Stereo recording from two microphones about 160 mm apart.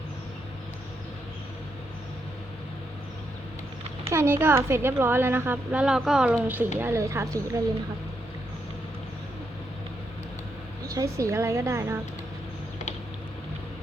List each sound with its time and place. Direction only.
4.0 s a woman's voice: 15° right (ahead or behind)
10.9 s a woman's voice: 20° right (ahead or behind)